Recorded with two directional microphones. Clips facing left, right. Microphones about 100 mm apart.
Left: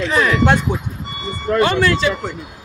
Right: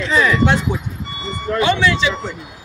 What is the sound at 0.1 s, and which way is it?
Speech, 55° left (ahead or behind).